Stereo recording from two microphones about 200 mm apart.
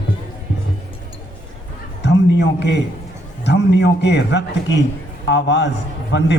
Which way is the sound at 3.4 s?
60° left (ahead or behind).